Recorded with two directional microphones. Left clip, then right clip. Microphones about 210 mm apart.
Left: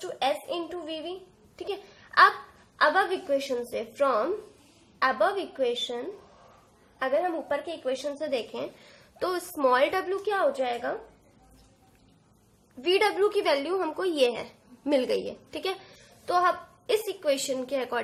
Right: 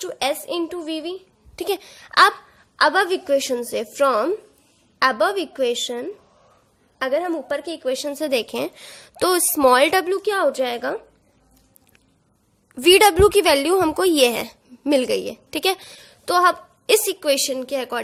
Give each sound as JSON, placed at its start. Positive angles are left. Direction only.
{"t": 0.0, "sound": "a woman's voice", "side_deg": -50}
{"t": 12.8, "sound": "a woman's voice", "side_deg": -50}